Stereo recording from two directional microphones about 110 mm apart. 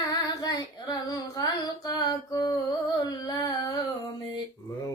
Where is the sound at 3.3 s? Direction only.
40° left (ahead or behind).